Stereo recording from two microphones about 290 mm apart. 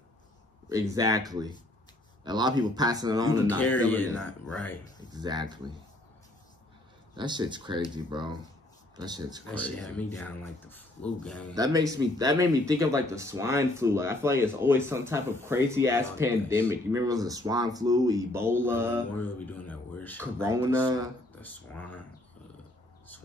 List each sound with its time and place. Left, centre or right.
0.7 s speech: centre
3.9 s speech: centre
5.1 s speech: centre
7.2 s speech: centre
9.5 s speech: centre
11.5 s speech: centre
19.1 s speech: centre
20.4 s speech: centre
21.4 s speech: centre